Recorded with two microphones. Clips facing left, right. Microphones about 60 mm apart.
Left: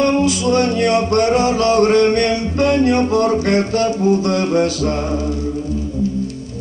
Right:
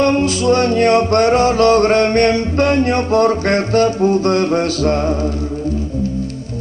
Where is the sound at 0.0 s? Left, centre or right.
Right.